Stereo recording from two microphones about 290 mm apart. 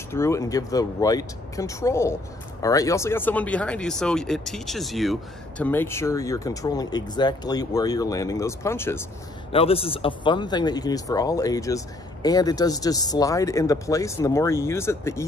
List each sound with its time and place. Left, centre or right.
0.1 s speech: centre
9.5 s speech: centre